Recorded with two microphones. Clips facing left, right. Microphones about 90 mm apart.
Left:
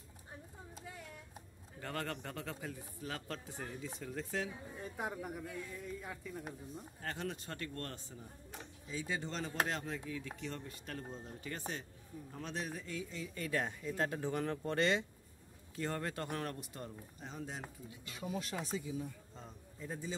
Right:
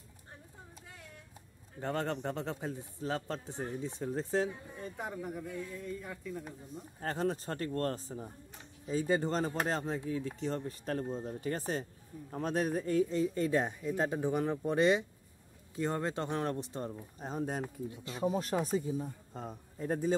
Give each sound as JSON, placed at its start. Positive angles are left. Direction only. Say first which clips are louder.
{"t": 1.8, "sound": "a man's voice", "louder": "right 7 dB", "side_deg": -25}
{"t": 4.8, "sound": "speech", "louder": "right 2 dB", "side_deg": 5}
{"t": 7.0, "sound": "a man's voice", "louder": "right 9 dB", "side_deg": -35}
{"t": 17.2, "sound": "speech", "louder": "right 10 dB", "side_deg": -45}
{"t": 17.8, "sound": "a man's voice", "louder": "right 12 dB", "side_deg": -35}
{"t": 19.3, "sound": "a man's voice", "louder": "right 9 dB", "side_deg": -60}